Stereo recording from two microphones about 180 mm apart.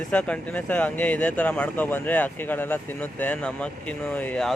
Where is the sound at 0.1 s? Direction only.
5° left (ahead or behind).